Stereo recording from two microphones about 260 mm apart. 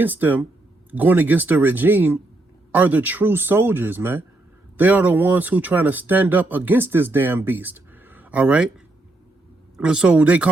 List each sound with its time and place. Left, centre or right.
0.0 s speech: centre
9.7 s speech: centre